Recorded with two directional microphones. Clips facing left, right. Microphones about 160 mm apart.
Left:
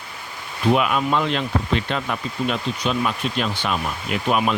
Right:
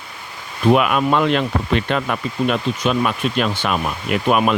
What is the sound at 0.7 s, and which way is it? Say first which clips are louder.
Speech: right 4 dB; 60° right (ahead or behind).